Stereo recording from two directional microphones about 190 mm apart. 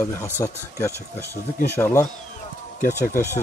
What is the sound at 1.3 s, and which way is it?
Speech, 55° left (ahead or behind).